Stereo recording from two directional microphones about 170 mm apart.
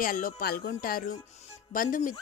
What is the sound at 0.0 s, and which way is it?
Speech, 55° left (ahead or behind).